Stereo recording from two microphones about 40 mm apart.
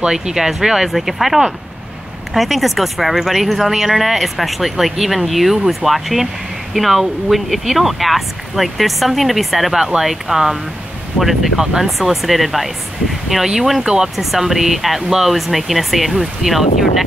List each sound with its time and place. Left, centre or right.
0.0 s speech: right; by 9.8 s centre
9.8 s speech: centre
14.1 s speech: centre